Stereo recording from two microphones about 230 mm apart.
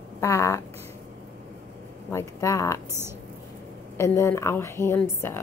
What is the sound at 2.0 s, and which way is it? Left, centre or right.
Speech, centre.